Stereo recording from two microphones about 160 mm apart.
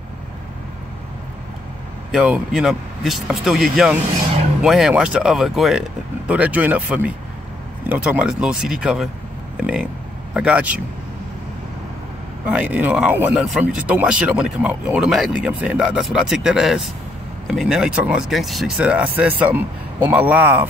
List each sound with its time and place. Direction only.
2.1 s speech: 5° right (ahead or behind)
12.4 s speech: 10° right (ahead or behind)